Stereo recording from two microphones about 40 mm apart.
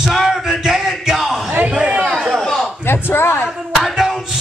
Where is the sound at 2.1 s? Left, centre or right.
Centre.